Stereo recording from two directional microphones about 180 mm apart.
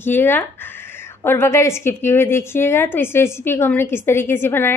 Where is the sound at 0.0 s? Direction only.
10° left (ahead or behind).